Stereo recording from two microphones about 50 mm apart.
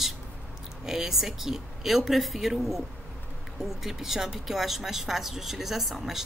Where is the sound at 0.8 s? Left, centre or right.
Centre.